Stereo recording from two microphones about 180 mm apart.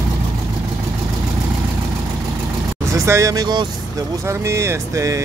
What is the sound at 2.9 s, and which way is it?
Speech, 15° right (ahead or behind).